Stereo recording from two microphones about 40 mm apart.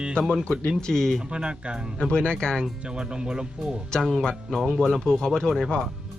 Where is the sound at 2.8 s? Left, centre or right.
Right.